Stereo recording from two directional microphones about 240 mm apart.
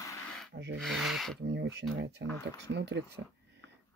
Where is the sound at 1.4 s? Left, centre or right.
Right.